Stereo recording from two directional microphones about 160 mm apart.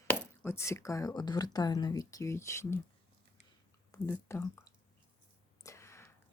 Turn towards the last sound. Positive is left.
turn(degrees=15)  # may be behind; listen again after turning